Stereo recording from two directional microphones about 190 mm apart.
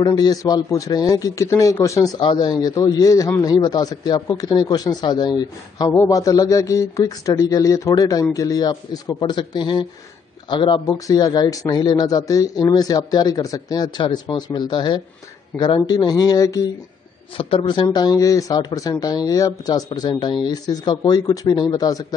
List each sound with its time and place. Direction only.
0.0 s a man's voice: 20° left (ahead or behind)
17.4 s a man's voice: 30° left (ahead or behind)